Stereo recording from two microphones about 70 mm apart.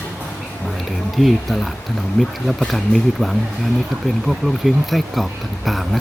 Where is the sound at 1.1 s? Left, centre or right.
Centre.